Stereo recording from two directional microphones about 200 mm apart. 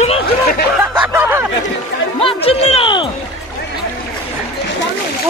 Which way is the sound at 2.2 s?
30° left (ahead or behind).